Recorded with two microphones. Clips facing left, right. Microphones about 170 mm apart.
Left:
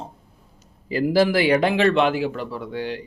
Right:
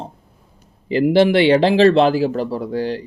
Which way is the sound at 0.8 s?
25° right (ahead or behind).